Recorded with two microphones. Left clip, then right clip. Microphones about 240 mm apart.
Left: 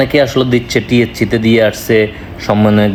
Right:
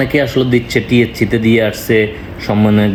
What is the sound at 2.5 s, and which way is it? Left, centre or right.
Speech, left.